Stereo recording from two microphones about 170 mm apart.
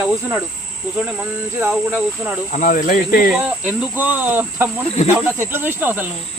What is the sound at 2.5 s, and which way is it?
Speech, 50° left (ahead or behind).